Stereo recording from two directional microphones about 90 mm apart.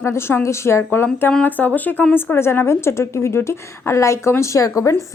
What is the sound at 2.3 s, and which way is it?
A woman's voice, 25° left (ahead or behind).